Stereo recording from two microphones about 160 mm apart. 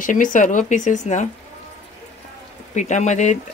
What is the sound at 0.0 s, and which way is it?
Speech, 55° left (ahead or behind).